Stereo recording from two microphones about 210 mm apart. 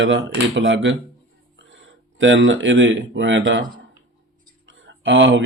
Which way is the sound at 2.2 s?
65° right (ahead or behind).